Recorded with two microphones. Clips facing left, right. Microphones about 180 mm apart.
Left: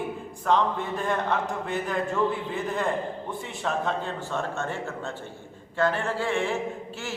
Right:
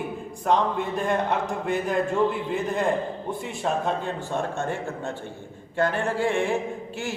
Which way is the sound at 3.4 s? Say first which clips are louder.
Right 2 dB; 15° right (ahead or behind).